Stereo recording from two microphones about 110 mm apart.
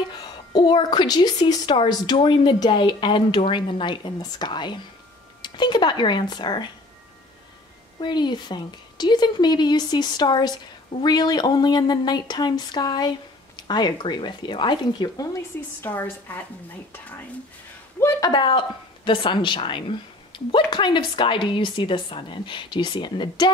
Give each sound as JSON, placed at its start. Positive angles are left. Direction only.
{"t": 0.1, "sound": "a woman's voice", "side_deg": 40}
{"t": 8.0, "sound": "a woman's voice", "side_deg": 40}
{"t": 15.8, "sound": "a woman's voice", "side_deg": 15}
{"t": 18.2, "sound": "a woman's voice", "side_deg": 45}